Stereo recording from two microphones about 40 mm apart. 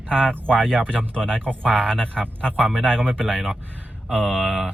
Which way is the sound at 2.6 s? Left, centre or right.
Centre.